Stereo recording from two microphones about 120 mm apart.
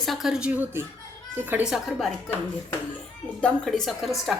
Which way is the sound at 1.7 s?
Centre (ahead or behind).